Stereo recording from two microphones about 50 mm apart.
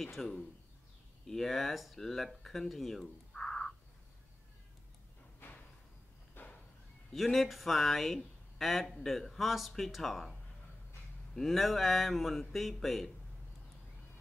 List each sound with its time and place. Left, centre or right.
0.0 s speech: centre
3.3 s a sound: centre
5.4 s a sound: left
6.4 s horse: left
7.1 s speech: centre
11.3 s speech: centre